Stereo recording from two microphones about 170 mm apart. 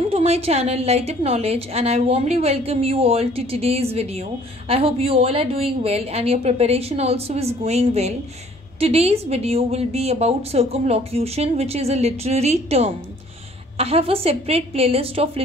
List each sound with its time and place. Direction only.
0.1 s a woman's voice: 35° right (ahead or behind)